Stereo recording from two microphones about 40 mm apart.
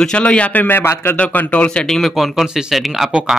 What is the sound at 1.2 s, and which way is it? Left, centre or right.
Speech, left.